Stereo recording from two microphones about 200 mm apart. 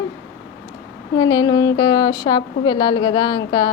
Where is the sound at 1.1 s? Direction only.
20° left (ahead or behind).